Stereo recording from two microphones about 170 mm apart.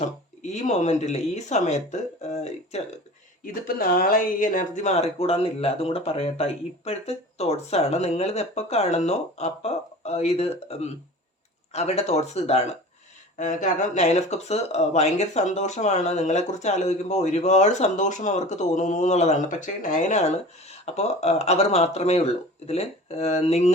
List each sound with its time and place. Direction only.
0.4 s speech: 40° left (ahead or behind)
3.4 s speech: 60° left (ahead or behind); by 23.7 s 40° left (ahead or behind)